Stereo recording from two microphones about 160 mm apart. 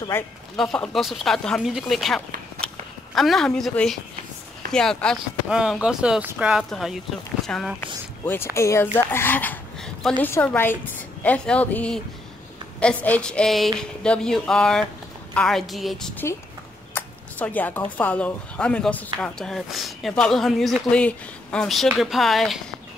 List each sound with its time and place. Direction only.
0.1 s a woman's voice: 15° left (ahead or behind)
0.6 s speech: centre (ahead or behind)
8.5 s a woman's voice: 15° left (ahead or behind)
8.9 s a sound: 15° left (ahead or behind)
10.2 s a woman's voice: 10° left (ahead or behind)
16.9 s speech: 10° left (ahead or behind)